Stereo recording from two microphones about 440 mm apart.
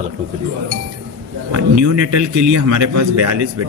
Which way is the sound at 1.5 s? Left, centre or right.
Right.